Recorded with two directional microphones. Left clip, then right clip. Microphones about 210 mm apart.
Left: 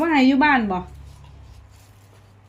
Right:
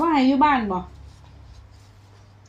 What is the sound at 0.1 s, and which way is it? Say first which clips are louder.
Speech: left 2 dB; 30° left (ahead or behind).